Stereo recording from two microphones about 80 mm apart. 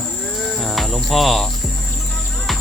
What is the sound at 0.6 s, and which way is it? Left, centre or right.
Cricket, centre.